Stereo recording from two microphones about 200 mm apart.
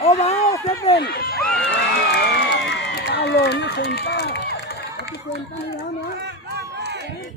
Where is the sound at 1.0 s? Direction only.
50° left (ahead or behind).